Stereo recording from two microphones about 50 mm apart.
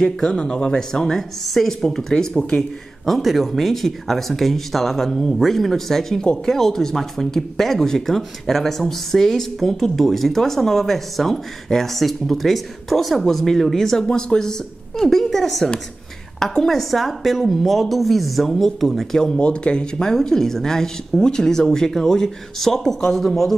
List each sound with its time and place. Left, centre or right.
0.0 s speech: centre
3.1 s speech: centre
6.2 s speech: centre
19.1 s speech: centre